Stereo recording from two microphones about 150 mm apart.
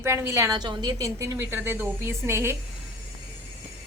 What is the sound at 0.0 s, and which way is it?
A woman's voice, 20° right (ahead or behind).